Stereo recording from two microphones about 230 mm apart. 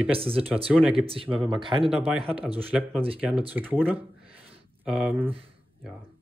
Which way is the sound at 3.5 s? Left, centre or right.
Centre.